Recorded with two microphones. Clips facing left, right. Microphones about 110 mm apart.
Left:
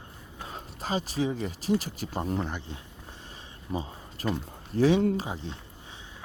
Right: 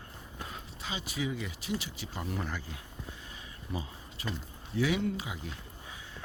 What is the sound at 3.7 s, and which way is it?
Speech, 35° left (ahead or behind).